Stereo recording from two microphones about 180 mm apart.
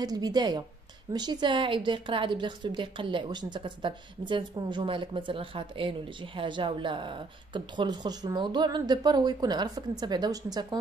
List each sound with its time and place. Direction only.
0.0 s a woman's voice: 20° right (ahead or behind)